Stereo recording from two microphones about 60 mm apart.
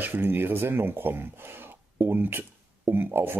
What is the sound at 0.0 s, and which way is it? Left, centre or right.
Speech, right.